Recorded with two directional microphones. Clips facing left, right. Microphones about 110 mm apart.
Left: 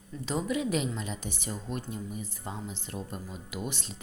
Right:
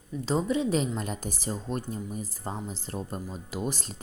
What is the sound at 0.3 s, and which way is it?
Speech, 30° right (ahead or behind).